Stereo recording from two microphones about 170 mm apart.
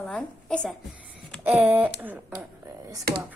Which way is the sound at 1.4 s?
10° right (ahead or behind).